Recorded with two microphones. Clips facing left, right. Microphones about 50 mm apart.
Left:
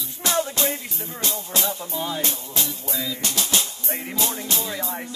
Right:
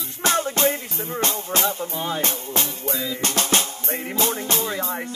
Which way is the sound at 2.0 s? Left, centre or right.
Right.